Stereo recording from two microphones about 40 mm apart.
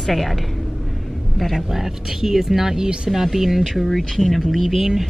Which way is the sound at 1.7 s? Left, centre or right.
Centre.